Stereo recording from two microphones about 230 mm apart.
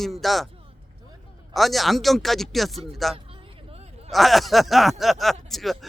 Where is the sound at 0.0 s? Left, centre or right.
Centre.